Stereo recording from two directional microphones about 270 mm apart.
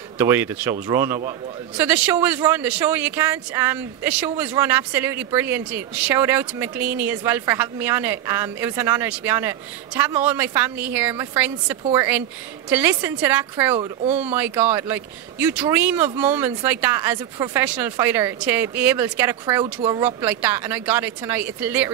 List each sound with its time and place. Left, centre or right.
0.2 s speech: centre
19.6 s speech: centre
20.0 s speech: centre